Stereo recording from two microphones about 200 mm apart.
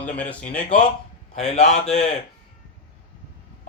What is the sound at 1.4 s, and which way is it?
Speech, 35° left (ahead or behind).